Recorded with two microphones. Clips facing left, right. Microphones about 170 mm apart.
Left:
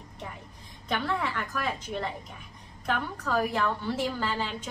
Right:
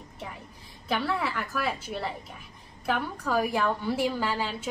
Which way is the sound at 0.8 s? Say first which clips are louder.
Right 1 dB; 5° right (ahead or behind).